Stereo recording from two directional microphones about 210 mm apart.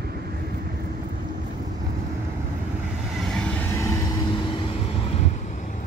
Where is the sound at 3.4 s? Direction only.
5° left (ahead or behind).